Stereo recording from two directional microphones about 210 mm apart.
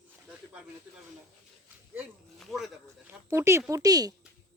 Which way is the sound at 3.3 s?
15° right (ahead or behind).